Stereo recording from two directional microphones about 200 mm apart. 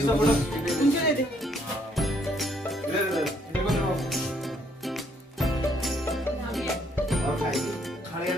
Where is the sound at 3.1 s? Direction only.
Centre (ahead or behind).